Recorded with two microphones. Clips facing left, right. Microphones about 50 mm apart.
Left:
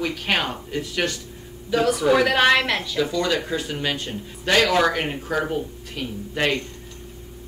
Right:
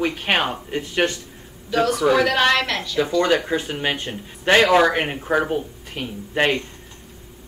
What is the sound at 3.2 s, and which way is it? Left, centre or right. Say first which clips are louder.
Speech: right 4 dB; right.